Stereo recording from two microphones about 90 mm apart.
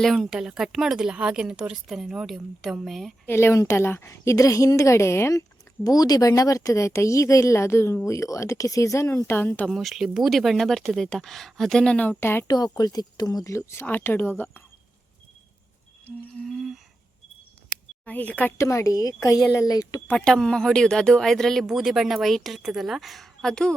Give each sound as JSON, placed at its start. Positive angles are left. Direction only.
{"t": 0.0, "sound": "a woman's voice", "side_deg": 0}
{"t": 3.2, "sound": "speech", "side_deg": 30}
{"t": 5.3, "sound": "speech", "side_deg": 40}
{"t": 9.6, "sound": "a woman's voice", "side_deg": 0}
{"t": 12.5, "sound": "speech", "side_deg": 50}
{"t": 13.8, "sound": "speech", "side_deg": 20}
{"t": 16.4, "sound": "humming", "side_deg": 0}
{"t": 18.0, "sound": "speech", "side_deg": 15}
{"t": 18.5, "sound": "speech", "side_deg": 30}
{"t": 20.1, "sound": "a woman's voice", "side_deg": 10}